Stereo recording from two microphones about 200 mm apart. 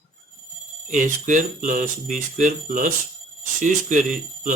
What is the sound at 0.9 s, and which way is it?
Speech, 40° right (ahead or behind).